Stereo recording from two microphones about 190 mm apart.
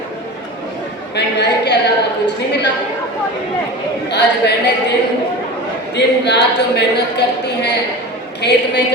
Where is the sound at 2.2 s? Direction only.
65° left (ahead or behind).